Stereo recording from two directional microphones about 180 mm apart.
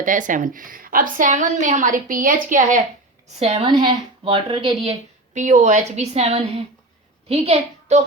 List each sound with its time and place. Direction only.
0.0 s a woman's voice: 45° right (ahead or behind)
3.3 s a woman's voice: 35° right (ahead or behind)